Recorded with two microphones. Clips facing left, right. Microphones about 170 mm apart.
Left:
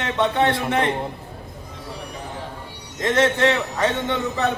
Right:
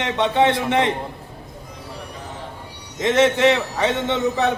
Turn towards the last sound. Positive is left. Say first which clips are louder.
# right 3 dB
turn(degrees=-20)  # may be behind; listen again after turning